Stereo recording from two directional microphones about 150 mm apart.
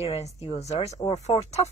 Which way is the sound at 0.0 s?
45° left (ahead or behind).